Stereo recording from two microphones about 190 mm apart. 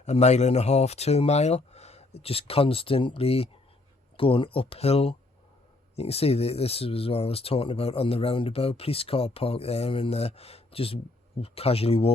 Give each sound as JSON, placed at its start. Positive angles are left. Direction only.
{"t": 0.0, "sound": "speech", "side_deg": 35}